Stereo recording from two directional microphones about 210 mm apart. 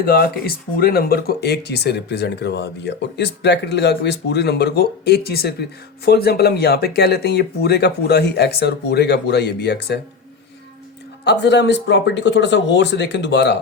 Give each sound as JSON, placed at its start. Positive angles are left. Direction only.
{"t": 0.0, "sound": "speech", "side_deg": 45}
{"t": 11.3, "sound": "speech", "side_deg": 55}